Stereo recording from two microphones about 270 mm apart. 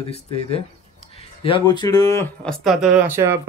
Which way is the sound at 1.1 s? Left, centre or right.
Left.